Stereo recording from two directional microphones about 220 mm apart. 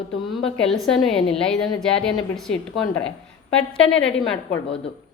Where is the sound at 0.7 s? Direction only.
Centre (ahead or behind).